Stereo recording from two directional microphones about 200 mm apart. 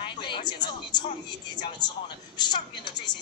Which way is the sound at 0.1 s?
20° left (ahead or behind).